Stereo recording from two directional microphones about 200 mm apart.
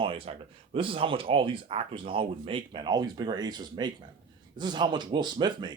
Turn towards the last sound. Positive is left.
turn(degrees=-20)  # may be behind; listen again after turning